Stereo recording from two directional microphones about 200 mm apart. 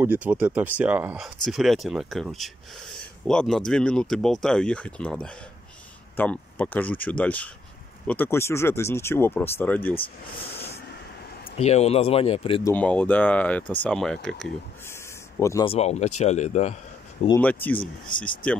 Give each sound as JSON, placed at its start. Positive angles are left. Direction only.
{"t": 0.0, "sound": "speech", "side_deg": -10}
{"t": 11.5, "sound": "speech", "side_deg": 30}
{"t": 12.6, "sound": "speech", "side_deg": 5}
{"t": 14.9, "sound": "a sound", "side_deg": 15}
{"t": 15.6, "sound": "speech", "side_deg": 30}
{"t": 17.4, "sound": "speech", "side_deg": 10}
{"t": 17.7, "sound": "speech", "side_deg": 25}